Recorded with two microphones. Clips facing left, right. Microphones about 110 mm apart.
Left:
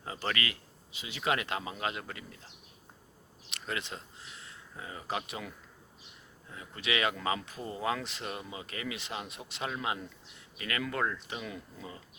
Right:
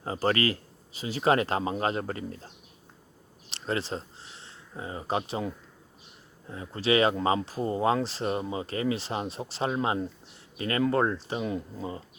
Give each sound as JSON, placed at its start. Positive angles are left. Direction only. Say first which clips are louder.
{"t": 0.0, "sound": "speech", "louder": "right 9 dB", "side_deg": -35}
{"t": 3.5, "sound": "speech", "louder": "right 8 dB", "side_deg": -35}